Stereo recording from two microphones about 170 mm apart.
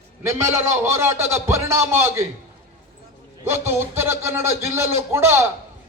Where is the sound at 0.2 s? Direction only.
15° right (ahead or behind).